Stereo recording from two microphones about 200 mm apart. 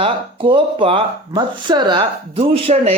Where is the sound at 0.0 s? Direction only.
25° right (ahead or behind).